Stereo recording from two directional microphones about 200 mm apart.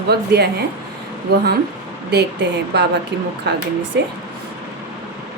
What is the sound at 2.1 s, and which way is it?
Speech, 55° right (ahead or behind).